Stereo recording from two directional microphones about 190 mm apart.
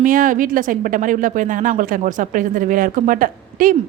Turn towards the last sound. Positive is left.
turn(degrees=-45)  # may be behind; listen again after turning